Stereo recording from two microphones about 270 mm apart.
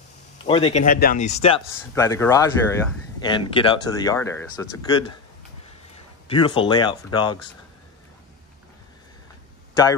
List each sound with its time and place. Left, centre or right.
0.5 s speech: centre
0.8 s speech: left
1.8 s speech: centre
6.2 s speech: centre